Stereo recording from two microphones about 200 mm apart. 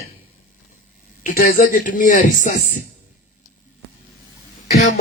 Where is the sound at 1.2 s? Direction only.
45° left (ahead or behind).